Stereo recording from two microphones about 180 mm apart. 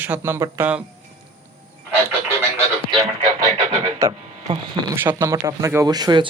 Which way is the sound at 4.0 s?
25° right (ahead or behind).